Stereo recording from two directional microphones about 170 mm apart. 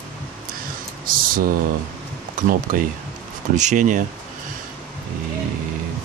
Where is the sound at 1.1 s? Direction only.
55° right (ahead or behind).